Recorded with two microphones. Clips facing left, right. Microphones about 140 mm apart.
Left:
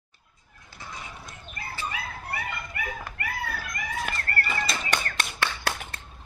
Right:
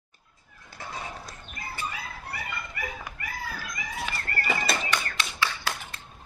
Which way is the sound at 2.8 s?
60° left (ahead or behind).